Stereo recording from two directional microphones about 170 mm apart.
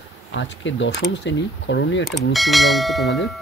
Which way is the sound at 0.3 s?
90° left.